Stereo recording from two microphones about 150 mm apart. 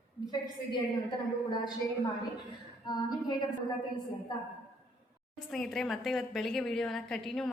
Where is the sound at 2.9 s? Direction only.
30° left (ahead or behind).